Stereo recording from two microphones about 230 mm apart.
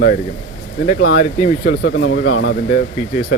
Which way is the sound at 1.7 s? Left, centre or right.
Left.